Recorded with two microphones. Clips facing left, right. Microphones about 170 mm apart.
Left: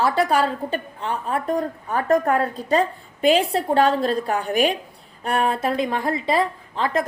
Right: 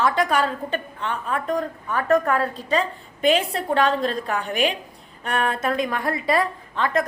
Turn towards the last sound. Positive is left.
turn(degrees=30)  # may be behind; listen again after turning